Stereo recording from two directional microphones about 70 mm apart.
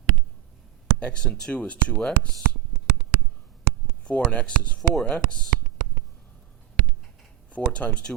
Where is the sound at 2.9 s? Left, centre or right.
Right.